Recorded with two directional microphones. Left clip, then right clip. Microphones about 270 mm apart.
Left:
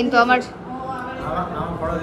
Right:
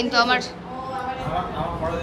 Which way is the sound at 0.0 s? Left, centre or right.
Centre.